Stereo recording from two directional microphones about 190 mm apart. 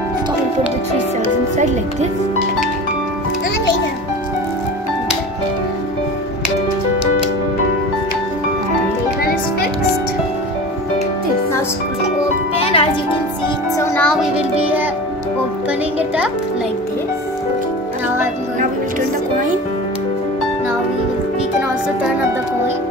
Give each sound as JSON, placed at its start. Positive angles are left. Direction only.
{"t": 9.2, "sound": "music", "side_deg": 50}
{"t": 12.5, "sound": "music", "side_deg": 30}
{"t": 13.7, "sound": "music", "side_deg": 10}